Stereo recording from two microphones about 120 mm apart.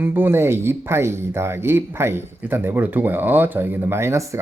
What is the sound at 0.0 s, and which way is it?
Speech, 15° right (ahead or behind).